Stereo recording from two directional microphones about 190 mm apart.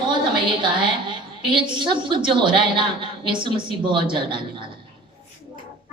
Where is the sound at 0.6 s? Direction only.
25° right (ahead or behind).